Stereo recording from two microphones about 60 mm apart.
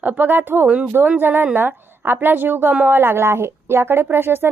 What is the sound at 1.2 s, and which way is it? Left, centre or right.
A woman's voice, right.